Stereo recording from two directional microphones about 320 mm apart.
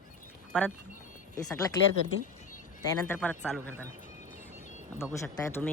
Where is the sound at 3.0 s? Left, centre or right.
Centre.